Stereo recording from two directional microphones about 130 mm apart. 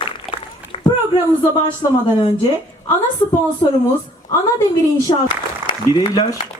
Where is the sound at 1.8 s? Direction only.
35° left (ahead or behind).